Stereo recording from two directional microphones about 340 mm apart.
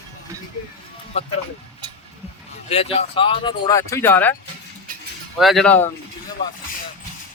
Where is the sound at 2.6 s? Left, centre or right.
Centre.